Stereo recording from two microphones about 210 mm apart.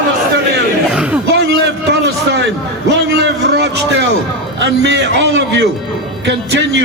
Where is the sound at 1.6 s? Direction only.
55° right (ahead or behind).